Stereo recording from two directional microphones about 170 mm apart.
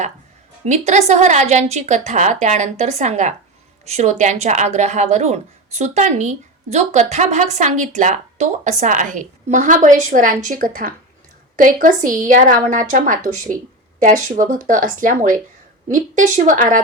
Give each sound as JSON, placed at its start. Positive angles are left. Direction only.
{"t": 0.6, "sound": "a woman's voice", "side_deg": -40}